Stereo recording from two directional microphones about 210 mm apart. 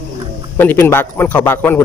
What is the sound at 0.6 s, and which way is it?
A man's voice, 10° left (ahead or behind).